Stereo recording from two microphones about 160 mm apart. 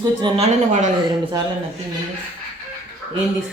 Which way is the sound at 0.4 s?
50° right (ahead or behind).